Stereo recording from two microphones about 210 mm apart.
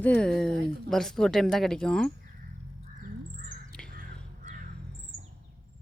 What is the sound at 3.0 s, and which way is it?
Crow, 45° right (ahead or behind).